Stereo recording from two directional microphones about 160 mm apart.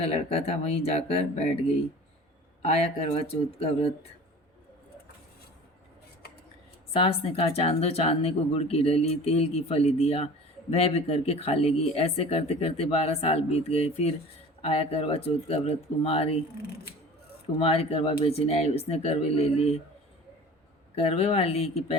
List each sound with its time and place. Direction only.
0.0 s speech: 40° left (ahead or behind)
2.6 s speech: 40° left (ahead or behind)
7.0 s speech: 35° left (ahead or behind)
17.6 s speech: 40° left (ahead or behind)
20.9 s speech: 40° left (ahead or behind)